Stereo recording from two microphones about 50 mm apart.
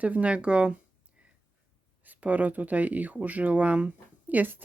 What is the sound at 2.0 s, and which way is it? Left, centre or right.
Speech, right.